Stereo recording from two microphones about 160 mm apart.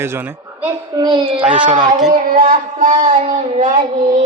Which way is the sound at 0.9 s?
30° right (ahead or behind).